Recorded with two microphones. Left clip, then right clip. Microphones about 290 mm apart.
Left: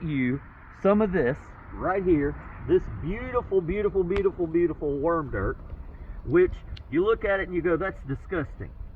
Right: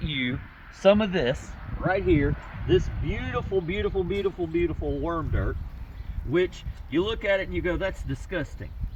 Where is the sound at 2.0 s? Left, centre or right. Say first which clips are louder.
Even; centre.